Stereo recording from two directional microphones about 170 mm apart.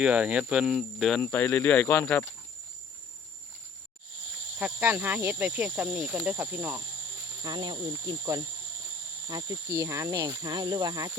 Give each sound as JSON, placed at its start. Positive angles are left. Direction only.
{"t": 0.0, "sound": "speech", "side_deg": -5}
{"t": 1.2, "sound": "speech", "side_deg": 10}
{"t": 4.6, "sound": "speech", "side_deg": -10}
{"t": 7.4, "sound": "cricket", "side_deg": -25}